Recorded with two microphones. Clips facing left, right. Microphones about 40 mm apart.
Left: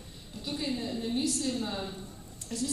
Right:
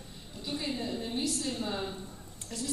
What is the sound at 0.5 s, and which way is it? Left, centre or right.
A woman's voice, centre.